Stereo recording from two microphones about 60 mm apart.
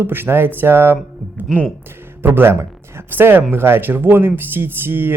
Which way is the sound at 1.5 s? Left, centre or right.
Centre.